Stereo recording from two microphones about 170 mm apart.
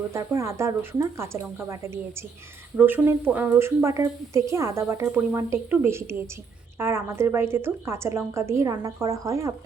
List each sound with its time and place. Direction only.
0.1 s a woman's voice: 15° right (ahead or behind)